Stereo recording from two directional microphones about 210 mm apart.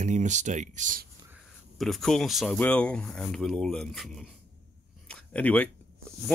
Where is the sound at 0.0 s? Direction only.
35° right (ahead or behind).